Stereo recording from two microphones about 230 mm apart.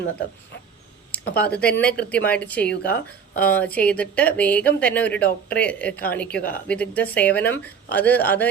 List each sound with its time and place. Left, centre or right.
1.2 s speech: left
1.8 s a woman's voice: centre
2.6 s speech: left
3.3 s speech: centre